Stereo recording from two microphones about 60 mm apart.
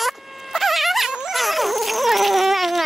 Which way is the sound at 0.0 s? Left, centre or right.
Centre.